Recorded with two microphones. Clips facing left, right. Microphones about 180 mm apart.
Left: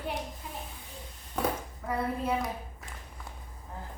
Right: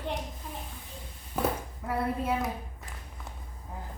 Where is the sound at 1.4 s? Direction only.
10° right (ahead or behind).